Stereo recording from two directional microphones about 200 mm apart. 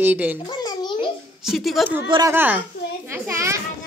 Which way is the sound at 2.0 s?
25° right (ahead or behind).